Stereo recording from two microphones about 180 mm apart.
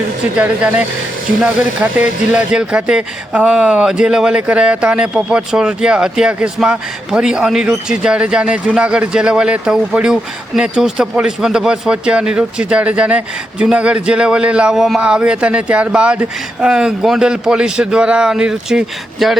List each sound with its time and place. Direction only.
0.3 s speech: 5° right (ahead or behind)